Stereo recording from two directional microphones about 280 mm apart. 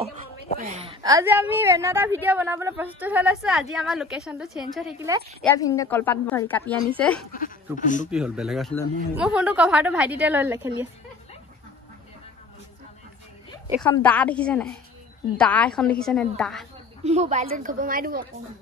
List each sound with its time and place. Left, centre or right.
0.6 s a woman's voice: right; by 5.1 s centre
5.4 s a woman's voice: centre
7.3 s speech: left
8.1 s a woman's voice: centre
13.7 s a woman's voice: centre
17.0 s a woman's voice: right